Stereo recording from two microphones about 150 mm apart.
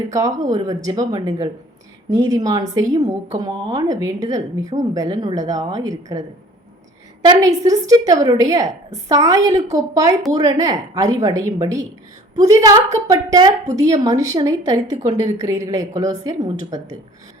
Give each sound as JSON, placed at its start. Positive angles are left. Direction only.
{"t": 0.1, "sound": "a woman's voice", "side_deg": -25}
{"t": 7.3, "sound": "a woman's voice", "side_deg": -25}